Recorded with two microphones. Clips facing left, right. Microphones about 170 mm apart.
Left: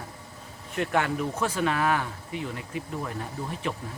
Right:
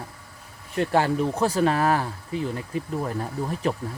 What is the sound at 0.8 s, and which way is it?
Speech, 30° right (ahead or behind).